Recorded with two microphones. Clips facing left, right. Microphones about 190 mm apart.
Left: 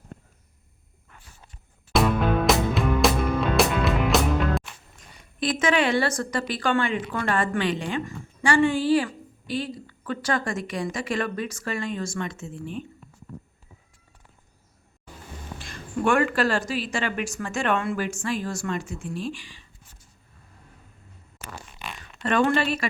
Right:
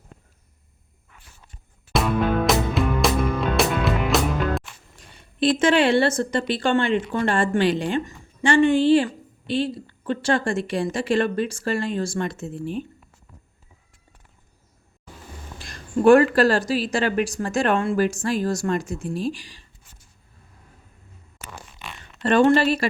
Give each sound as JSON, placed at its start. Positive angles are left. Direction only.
{"t": 1.9, "sound": "music", "side_deg": 0}
{"t": 5.1, "sound": "a woman's voice", "side_deg": -30}
{"t": 8.0, "sound": "a woman's voice", "side_deg": -20}
{"t": 15.6, "sound": "speech", "side_deg": -35}
{"t": 22.2, "sound": "speech", "side_deg": -35}